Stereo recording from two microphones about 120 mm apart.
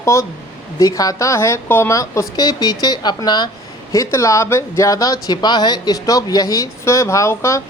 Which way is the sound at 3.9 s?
25° left (ahead or behind).